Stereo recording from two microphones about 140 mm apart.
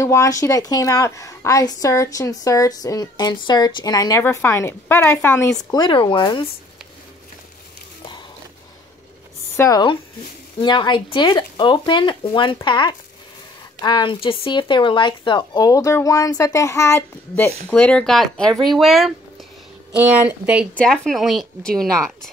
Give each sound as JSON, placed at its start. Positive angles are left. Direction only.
{"t": 0.0, "sound": "a woman's voice", "side_deg": 20}
{"t": 5.7, "sound": "speech", "side_deg": 30}
{"t": 9.6, "sound": "a woman's voice", "side_deg": 25}
{"t": 17.6, "sound": "a woman's voice", "side_deg": 10}
{"t": 20.7, "sound": "a woman's voice", "side_deg": 5}